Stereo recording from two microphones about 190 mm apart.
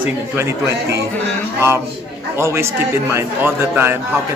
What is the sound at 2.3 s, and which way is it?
Speech, 15° right (ahead or behind).